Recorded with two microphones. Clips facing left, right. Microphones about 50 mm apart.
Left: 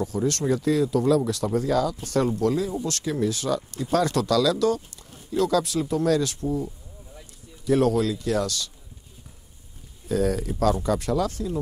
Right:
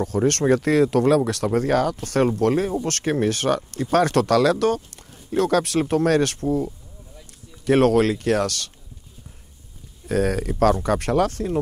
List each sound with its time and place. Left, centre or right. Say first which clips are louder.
0.0 s speech: right 5 dB; right
10.0 s speech: right 2 dB; right